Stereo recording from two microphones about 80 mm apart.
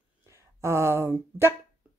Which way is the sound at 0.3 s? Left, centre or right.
Right.